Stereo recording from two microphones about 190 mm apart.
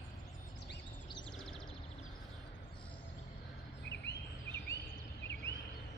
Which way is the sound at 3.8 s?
65° left (ahead or behind).